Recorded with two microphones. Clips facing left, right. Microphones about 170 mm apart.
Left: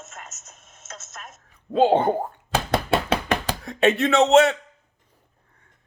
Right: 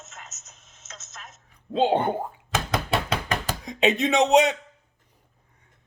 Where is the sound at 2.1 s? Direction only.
30° left (ahead or behind).